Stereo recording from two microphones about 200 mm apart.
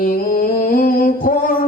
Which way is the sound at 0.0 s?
45° left (ahead or behind).